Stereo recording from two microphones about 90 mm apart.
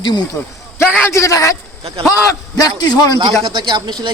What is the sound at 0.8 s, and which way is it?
Speech, 30° left (ahead or behind).